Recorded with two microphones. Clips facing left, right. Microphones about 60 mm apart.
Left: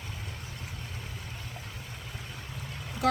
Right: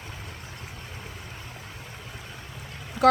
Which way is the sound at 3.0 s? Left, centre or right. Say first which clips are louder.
Right 8 dB; right.